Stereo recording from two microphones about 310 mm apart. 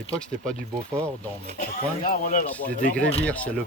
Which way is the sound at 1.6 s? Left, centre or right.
Left.